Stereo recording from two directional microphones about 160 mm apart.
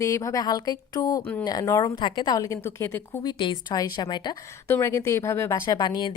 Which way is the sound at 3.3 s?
30° left (ahead or behind).